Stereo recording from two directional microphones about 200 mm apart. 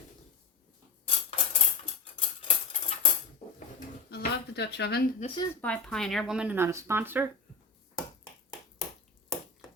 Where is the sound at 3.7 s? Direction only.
55° left (ahead or behind).